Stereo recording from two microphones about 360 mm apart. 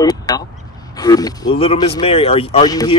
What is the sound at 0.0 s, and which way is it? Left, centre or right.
Speech, centre.